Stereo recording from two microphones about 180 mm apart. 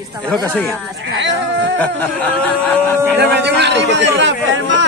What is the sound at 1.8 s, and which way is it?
Speech, 10° left (ahead or behind).